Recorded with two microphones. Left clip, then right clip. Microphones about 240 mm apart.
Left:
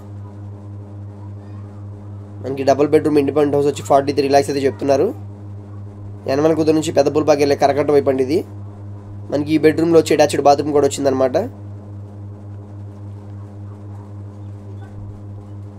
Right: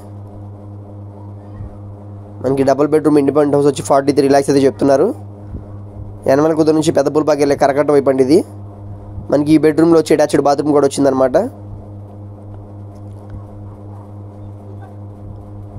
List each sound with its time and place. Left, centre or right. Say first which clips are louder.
2.4 s speech: right 3 dB; right
6.2 s speech: right 3 dB; right